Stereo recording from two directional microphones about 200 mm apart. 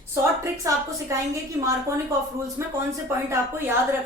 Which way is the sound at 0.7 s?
15° right (ahead or behind).